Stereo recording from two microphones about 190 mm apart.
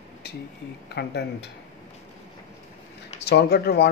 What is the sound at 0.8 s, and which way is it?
Speech, 60° left (ahead or behind).